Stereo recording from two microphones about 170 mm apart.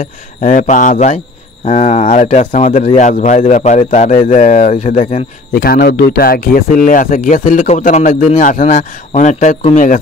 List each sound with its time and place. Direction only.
0.0 s speech: 50° left (ahead or behind)
5.5 s speech: 65° left (ahead or behind); by 9.6 s 45° left (ahead or behind)